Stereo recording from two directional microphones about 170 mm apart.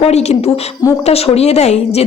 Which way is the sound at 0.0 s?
40° left (ahead or behind).